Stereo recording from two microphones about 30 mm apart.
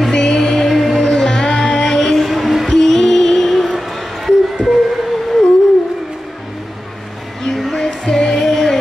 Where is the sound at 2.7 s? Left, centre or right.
Centre.